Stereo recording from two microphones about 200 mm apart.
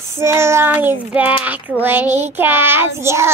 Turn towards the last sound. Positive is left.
turn(degrees=-15)  # may be behind; listen again after turning